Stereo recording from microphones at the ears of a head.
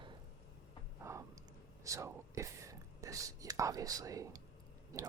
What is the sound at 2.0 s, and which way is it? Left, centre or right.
Speech, right.